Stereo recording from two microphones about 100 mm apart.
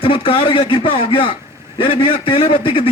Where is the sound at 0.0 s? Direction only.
65° left (ahead or behind).